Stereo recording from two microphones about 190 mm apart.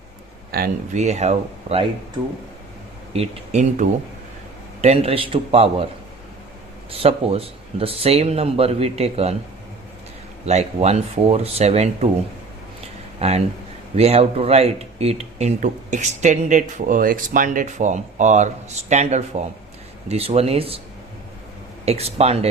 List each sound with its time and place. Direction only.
0.5 s speech: 55° right (ahead or behind)
0.9 s speech: 35° right (ahead or behind)
3.1 s a man's voice: 35° right (ahead or behind)
6.9 s speech: 30° right (ahead or behind)
10.4 s speech: 35° right (ahead or behind)
13.1 s speech: 35° right (ahead or behind)
21.8 s speech: 35° right (ahead or behind)